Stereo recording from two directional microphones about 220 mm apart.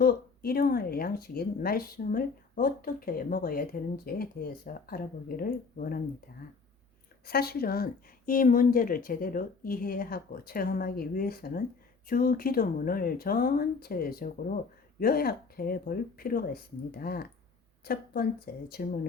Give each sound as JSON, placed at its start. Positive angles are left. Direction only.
{"t": 0.0, "sound": "speech", "side_deg": 45}
{"t": 7.3, "sound": "a woman's voice", "side_deg": 45}